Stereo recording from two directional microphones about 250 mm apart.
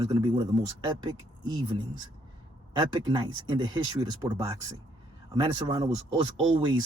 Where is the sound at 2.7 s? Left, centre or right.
Centre.